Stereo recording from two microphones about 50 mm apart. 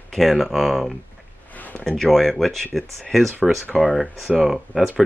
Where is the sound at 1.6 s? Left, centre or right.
Left.